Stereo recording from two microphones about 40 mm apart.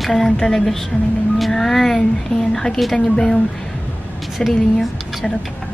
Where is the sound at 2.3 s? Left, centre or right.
Left.